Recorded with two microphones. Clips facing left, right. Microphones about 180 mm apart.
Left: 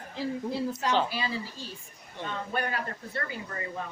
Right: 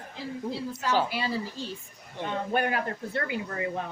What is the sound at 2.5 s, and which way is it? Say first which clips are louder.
Speech: right 5 dB; 60° right (ahead or behind).